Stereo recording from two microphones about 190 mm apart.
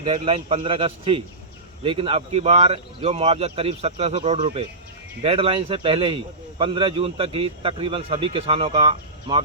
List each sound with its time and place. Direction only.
0.0 s a man's voice: 30° right (ahead or behind)